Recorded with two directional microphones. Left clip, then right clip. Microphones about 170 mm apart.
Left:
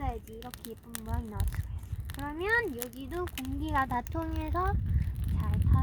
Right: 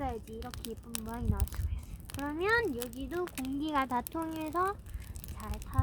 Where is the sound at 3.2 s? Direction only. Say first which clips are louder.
Even; 25° right (ahead or behind).